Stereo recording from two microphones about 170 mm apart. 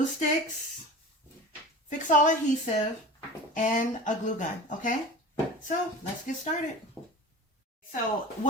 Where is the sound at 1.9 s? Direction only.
50° left (ahead or behind).